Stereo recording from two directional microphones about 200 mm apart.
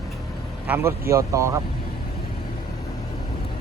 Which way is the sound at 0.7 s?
10° right (ahead or behind).